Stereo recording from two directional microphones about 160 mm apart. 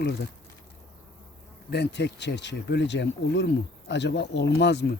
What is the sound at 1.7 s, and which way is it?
Speech, 90° left.